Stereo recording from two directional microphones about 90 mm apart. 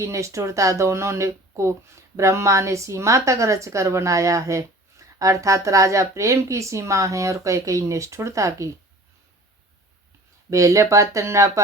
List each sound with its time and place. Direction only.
0.0 s speech: 35° right (ahead or behind)
10.5 s speech: 35° right (ahead or behind)